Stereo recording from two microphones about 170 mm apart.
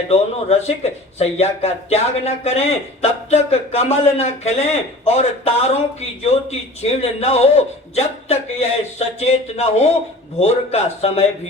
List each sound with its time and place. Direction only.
0.1 s a man's voice: 40° left (ahead or behind)
7.0 s a man's voice: 40° left (ahead or behind)